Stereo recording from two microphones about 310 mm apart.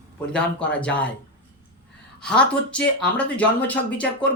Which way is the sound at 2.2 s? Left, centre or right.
Centre.